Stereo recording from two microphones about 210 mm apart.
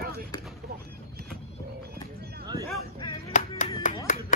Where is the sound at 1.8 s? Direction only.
50° right (ahead or behind).